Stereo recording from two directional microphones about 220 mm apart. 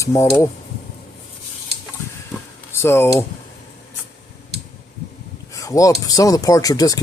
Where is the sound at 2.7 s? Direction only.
10° left (ahead or behind).